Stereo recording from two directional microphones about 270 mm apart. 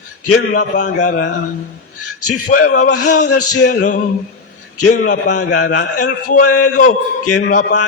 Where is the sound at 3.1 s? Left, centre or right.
Left.